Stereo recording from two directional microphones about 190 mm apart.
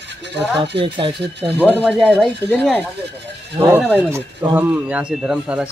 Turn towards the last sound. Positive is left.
turn(degrees=-5)  # may be behind; listen again after turning